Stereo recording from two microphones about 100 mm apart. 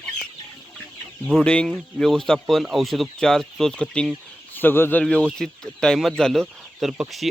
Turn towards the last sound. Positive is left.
turn(degrees=0)  # may be behind; listen again after turning